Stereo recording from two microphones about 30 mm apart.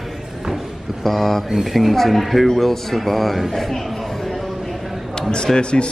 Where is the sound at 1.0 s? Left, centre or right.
Centre.